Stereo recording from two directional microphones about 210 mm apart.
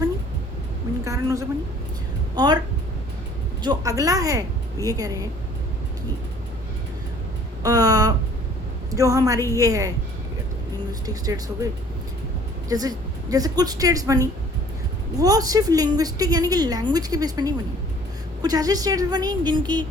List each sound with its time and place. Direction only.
1.0 s a woman's voice: 15° right (ahead or behind)
3.6 s a woman's voice: 20° right (ahead or behind)
7.6 s a sound: 15° right (ahead or behind)
8.9 s a woman's voice: 15° right (ahead or behind)
11.0 s a woman's voice: 15° right (ahead or behind)